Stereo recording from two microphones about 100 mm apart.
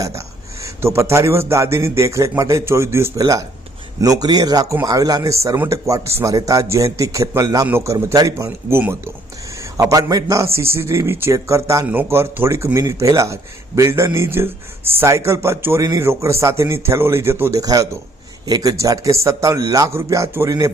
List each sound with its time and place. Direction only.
0.6 s a man's voice: 25° right (ahead or behind)
8.4 s speech: 15° right (ahead or behind)
9.7 s a man's voice: 35° right (ahead or behind)
17.6 s speech: 35° right (ahead or behind)